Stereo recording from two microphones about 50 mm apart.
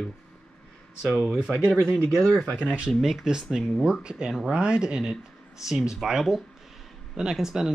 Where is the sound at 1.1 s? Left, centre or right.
Centre.